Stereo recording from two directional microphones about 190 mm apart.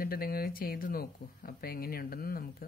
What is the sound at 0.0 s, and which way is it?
Speech, 50° left (ahead or behind).